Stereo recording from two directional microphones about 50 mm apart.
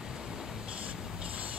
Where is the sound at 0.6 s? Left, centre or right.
Right.